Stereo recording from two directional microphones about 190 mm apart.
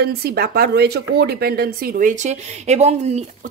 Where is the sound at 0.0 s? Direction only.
55° right (ahead or behind).